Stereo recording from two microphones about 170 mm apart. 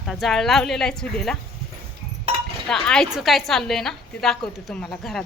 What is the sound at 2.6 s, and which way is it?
A woman's voice, 5° left (ahead or behind).